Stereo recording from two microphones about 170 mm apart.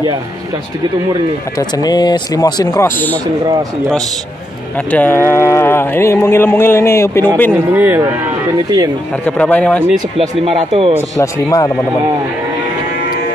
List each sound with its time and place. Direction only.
1.6 s speech: 25° left (ahead or behind)
4.7 s speech: 10° left (ahead or behind)
7.7 s speech: 10° right (ahead or behind)
9.2 s speech: 10° left (ahead or behind)
10.1 s speech: 40° right (ahead or behind)
11.1 s speech: 20° left (ahead or behind)